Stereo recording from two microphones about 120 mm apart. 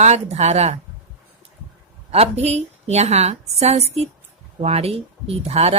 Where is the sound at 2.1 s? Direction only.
60° right (ahead or behind).